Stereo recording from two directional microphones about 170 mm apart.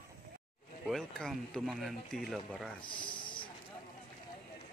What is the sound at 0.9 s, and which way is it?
Speech, 5° left (ahead or behind).